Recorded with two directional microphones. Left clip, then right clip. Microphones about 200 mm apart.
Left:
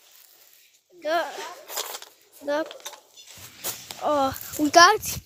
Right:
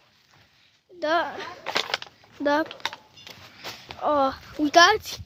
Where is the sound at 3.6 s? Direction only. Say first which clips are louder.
Left 2 dB; 70° left (ahead or behind).